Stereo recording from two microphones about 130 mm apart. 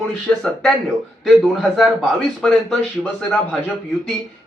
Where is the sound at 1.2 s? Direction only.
Centre (ahead or behind).